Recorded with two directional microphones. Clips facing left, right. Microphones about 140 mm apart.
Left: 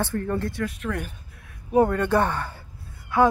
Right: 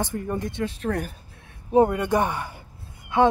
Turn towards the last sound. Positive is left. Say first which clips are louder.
# even
turn(degrees=-20)  # may be behind; listen again after turning